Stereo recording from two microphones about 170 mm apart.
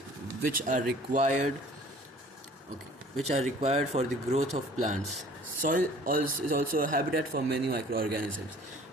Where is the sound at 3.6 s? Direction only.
40° right (ahead or behind).